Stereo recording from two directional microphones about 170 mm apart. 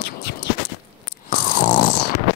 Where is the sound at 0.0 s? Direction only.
70° left (ahead or behind).